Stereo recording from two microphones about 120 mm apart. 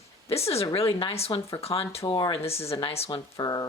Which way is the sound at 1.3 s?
25° left (ahead or behind).